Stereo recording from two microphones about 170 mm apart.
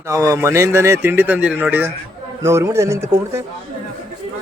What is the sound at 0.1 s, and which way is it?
A man's voice, 20° right (ahead or behind).